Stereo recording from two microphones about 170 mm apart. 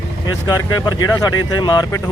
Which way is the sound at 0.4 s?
20° left (ahead or behind).